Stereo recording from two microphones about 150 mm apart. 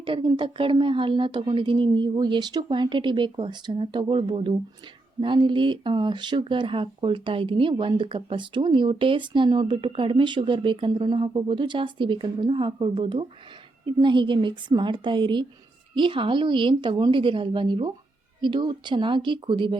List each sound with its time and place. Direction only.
0.0 s speech: 35° right (ahead or behind)